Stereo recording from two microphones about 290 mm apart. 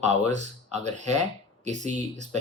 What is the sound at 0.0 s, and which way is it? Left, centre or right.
Speech, right.